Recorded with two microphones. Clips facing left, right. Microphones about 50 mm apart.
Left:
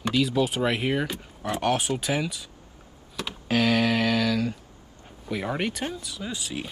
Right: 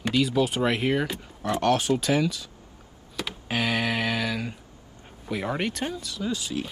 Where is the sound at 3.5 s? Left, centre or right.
Centre.